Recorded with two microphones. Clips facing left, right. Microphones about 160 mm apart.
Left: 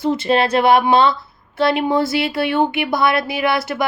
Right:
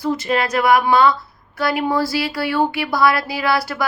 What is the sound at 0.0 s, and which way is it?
Speech, 25° left (ahead or behind).